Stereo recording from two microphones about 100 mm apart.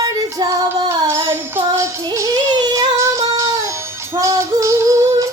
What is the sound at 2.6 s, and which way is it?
Female singing, 40° right (ahead or behind).